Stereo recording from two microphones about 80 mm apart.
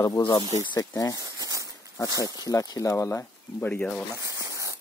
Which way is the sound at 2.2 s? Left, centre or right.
Left.